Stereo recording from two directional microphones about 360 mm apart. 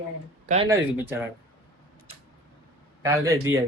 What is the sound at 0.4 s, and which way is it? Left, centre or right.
Speech, centre.